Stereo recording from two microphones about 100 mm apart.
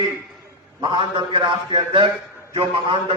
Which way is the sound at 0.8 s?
55° right (ahead or behind).